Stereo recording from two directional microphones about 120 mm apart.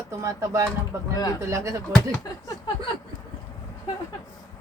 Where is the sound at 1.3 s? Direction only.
25° right (ahead or behind).